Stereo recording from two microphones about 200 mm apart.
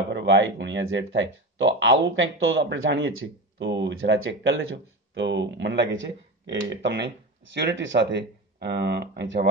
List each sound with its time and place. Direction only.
0.1 s speech: 65° right (ahead or behind)